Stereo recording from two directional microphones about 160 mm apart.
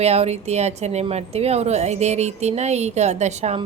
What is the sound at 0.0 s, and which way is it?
A woman's voice, 40° right (ahead or behind).